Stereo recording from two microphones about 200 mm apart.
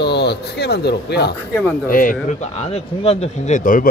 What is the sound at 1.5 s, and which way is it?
Speech, 5° left (ahead or behind).